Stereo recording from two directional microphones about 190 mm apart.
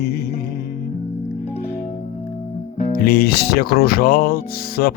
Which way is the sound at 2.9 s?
50° left (ahead or behind).